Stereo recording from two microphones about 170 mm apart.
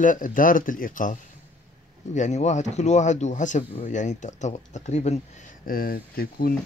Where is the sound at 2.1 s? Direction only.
45° left (ahead or behind).